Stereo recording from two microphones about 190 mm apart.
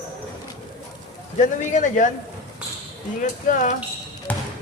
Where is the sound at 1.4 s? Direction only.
40° left (ahead or behind).